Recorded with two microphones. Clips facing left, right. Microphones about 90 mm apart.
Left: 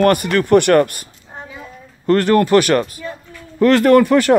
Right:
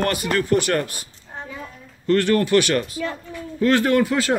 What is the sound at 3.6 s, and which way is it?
Speech, 75° left (ahead or behind).